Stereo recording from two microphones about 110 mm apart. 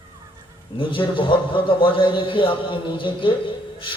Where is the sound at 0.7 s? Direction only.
50° left (ahead or behind).